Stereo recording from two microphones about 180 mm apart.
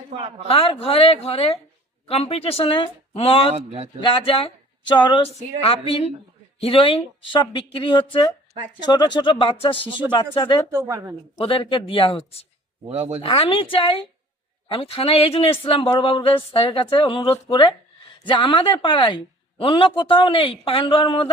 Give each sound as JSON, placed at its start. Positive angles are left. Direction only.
{"t": 0.2, "sound": "speech", "side_deg": -35}
{"t": 0.4, "sound": "speech", "side_deg": 30}
{"t": 3.5, "sound": "speech", "side_deg": -35}
{"t": 4.0, "sound": "speech", "side_deg": 30}
{"t": 6.6, "sound": "a woman's voice", "side_deg": 30}
{"t": 10.7, "sound": "a woman's voice", "side_deg": -15}
{"t": 11.3, "sound": "a woman's voice", "side_deg": 30}
{"t": 12.8, "sound": "speech", "side_deg": -35}
{"t": 13.2, "sound": "a woman's voice", "side_deg": 30}